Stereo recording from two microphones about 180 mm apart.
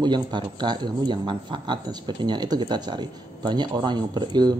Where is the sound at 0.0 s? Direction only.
25° right (ahead or behind).